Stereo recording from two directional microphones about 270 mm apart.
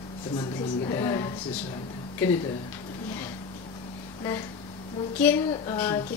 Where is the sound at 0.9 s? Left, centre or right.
Centre.